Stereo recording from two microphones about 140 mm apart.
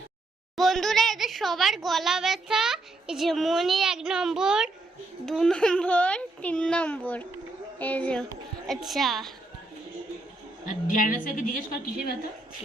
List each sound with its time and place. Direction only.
0.5 s a woman's voice: centre (ahead or behind)
10.7 s a woman's voice: 75° left (ahead or behind)